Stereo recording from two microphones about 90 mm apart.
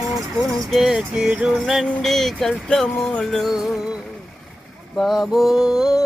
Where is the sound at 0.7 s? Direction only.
Centre (ahead or behind).